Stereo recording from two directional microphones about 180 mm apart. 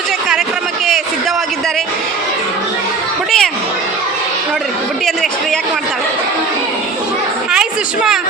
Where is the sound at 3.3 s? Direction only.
Centre (ahead or behind).